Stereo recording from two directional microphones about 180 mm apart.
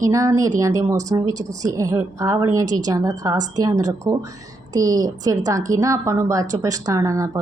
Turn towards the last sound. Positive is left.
turn(degrees=-20)  # may be behind; listen again after turning